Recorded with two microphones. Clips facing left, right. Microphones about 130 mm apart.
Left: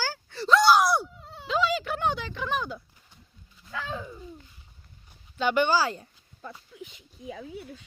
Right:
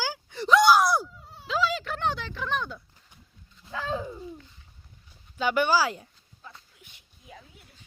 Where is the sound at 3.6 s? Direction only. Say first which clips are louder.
Right 4 dB; 30° right (ahead or behind).